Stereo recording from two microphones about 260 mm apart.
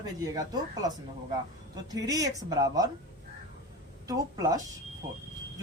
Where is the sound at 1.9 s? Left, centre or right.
Centre.